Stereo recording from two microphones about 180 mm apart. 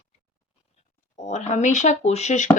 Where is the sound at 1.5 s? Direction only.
40° left (ahead or behind).